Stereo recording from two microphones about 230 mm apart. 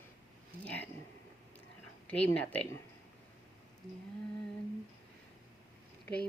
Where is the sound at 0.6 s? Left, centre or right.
Centre.